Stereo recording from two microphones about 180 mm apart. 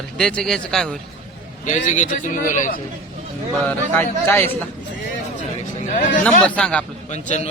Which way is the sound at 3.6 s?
15° left (ahead or behind).